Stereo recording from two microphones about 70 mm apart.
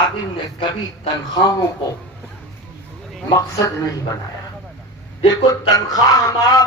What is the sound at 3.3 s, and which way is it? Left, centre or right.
Speech, left.